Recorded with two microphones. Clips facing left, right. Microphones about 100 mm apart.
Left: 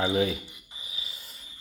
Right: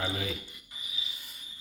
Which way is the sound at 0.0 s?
30° left (ahead or behind).